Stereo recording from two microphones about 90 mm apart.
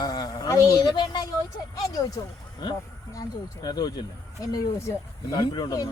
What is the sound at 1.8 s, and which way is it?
Speech, 45° left (ahead or behind).